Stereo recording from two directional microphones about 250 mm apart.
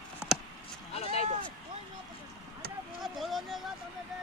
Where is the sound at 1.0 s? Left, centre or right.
Left.